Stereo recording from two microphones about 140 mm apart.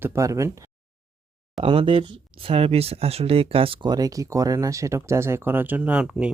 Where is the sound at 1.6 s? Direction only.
40° right (ahead or behind).